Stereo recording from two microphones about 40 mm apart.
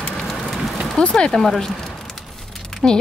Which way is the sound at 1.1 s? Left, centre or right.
Centre.